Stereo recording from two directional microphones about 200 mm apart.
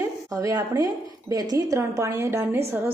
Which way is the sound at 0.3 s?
15° right (ahead or behind).